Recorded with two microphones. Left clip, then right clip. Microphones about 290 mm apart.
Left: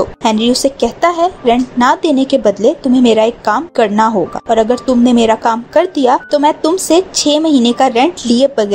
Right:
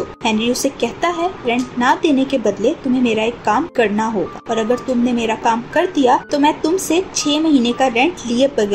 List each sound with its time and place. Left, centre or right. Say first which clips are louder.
0.2 s a woman's voice: left 4 dB; left